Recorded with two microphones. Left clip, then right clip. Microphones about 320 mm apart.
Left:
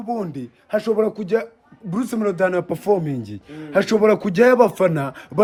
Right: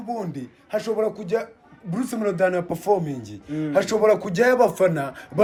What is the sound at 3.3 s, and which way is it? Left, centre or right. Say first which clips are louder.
A man's voice: right 5 dB; left.